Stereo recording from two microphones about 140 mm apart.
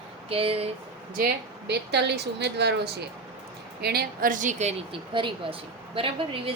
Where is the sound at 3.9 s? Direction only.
80° right; by 4.7 s 65° right (ahead or behind).